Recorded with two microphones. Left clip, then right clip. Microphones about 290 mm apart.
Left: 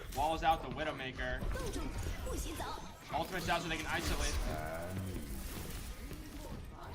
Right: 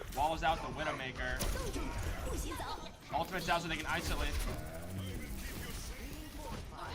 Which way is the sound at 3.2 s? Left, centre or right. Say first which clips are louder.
Right 1 dB; centre.